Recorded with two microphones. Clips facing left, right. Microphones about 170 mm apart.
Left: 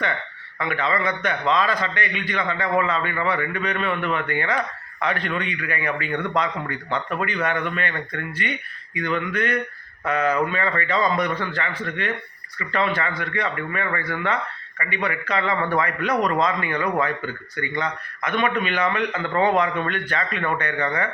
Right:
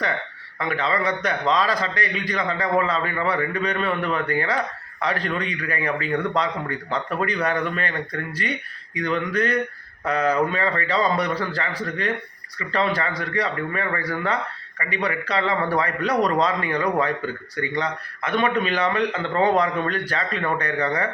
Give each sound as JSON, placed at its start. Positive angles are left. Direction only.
{"t": 0.6, "sound": "a man's voice", "side_deg": -35}